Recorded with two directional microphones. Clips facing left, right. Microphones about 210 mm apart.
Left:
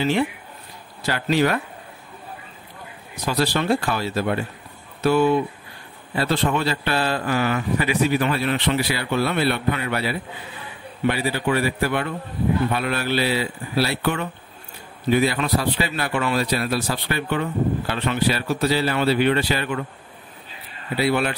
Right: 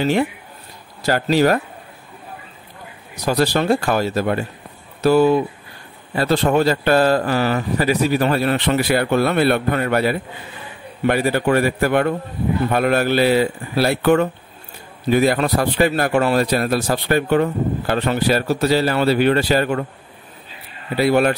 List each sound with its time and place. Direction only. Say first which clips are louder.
0.0 s speech: right 3 dB; 45° right (ahead or behind)
3.3 s speech: right 4 dB; 45° right (ahead or behind)
20.9 s speech: right 6 dB; 45° right (ahead or behind)